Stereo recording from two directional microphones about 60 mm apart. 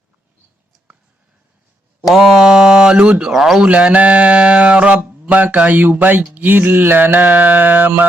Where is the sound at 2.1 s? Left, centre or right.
Centre.